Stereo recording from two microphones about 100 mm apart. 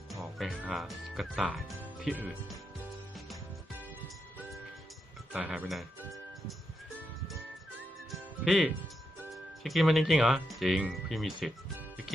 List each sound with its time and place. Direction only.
0.1 s music: centre (ahead or behind)
0.7 s speech: centre (ahead or behind)
5.3 s speech: 10° right (ahead or behind)
8.1 s music: centre (ahead or behind)
9.3 s speech: centre (ahead or behind)